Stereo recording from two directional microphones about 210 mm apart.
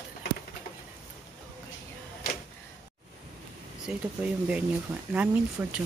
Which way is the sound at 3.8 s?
5° right (ahead or behind).